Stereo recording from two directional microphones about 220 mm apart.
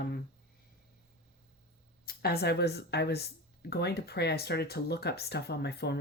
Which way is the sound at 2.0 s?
45° left (ahead or behind).